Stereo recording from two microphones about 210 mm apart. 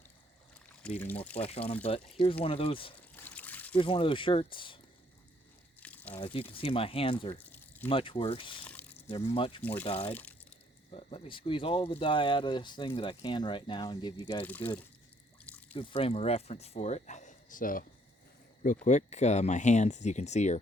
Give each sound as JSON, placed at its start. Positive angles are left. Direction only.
{"t": 0.8, "sound": "speech", "side_deg": 5}
{"t": 1.4, "sound": "speech", "side_deg": 30}
{"t": 3.2, "sound": "a sound", "side_deg": 10}
{"t": 3.8, "sound": "speech", "side_deg": 25}
{"t": 5.8, "sound": "crumpling", "side_deg": 5}
{"t": 6.1, "sound": "speech", "side_deg": 25}
{"t": 10.1, "sound": "speech", "side_deg": 10}
{"t": 10.9, "sound": "speech", "side_deg": 25}
{"t": 14.4, "sound": "speech", "side_deg": 10}
{"t": 15.7, "sound": "speech", "side_deg": 25}